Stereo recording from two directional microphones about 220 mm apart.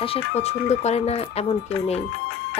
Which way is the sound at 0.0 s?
25° left (ahead or behind).